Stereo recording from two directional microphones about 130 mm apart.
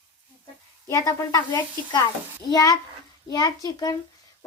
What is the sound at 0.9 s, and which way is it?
Speech, 25° left (ahead or behind).